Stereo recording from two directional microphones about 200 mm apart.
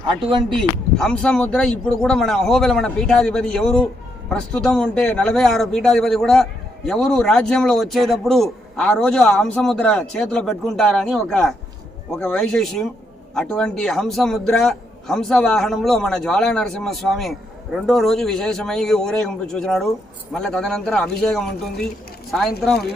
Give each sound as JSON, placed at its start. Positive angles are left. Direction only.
{"t": 0.1, "sound": "speech", "side_deg": -25}
{"t": 0.5, "sound": "a man's voice", "side_deg": 5}